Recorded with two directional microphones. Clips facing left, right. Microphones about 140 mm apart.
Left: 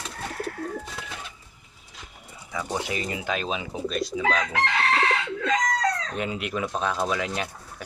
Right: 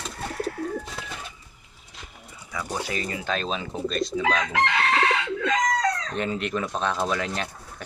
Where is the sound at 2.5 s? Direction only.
20° left (ahead or behind).